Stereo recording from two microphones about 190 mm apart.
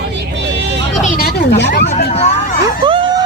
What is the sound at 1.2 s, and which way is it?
Speech, 60° left (ahead or behind).